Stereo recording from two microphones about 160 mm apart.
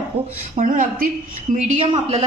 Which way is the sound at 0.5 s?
55° right (ahead or behind).